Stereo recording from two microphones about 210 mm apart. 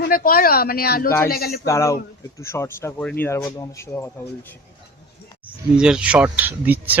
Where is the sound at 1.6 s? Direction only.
15° left (ahead or behind).